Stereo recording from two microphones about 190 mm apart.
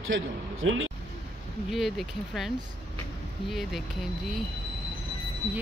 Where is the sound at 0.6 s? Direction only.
90° right.